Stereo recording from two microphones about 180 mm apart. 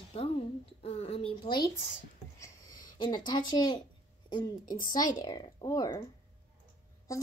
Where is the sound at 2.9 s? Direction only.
25° left (ahead or behind).